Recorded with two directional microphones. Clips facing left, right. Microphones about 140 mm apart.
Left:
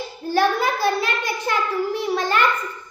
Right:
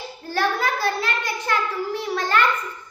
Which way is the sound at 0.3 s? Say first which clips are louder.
Left 4 dB; 15° left (ahead or behind).